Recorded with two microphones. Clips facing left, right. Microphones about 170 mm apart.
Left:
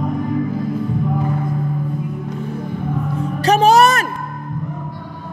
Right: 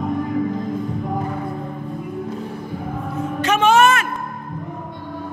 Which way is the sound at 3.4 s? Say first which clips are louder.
Left 3 dB; 35° left (ahead or behind).